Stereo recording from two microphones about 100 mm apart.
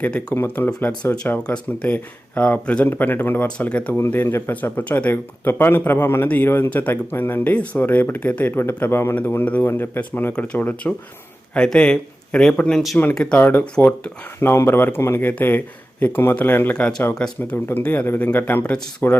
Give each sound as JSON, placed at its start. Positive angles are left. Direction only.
{"t": 0.0, "sound": "speech", "side_deg": 10}
{"t": 0.3, "sound": "speech", "side_deg": 20}
{"t": 13.4, "sound": "speech", "side_deg": 20}